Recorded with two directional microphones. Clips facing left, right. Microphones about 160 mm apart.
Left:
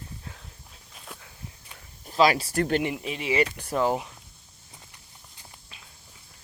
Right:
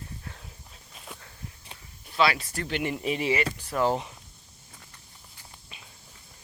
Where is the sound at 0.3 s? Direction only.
Centre (ahead or behind).